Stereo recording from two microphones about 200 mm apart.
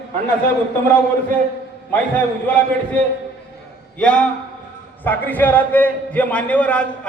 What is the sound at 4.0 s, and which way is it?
A man's voice, 5° left (ahead or behind).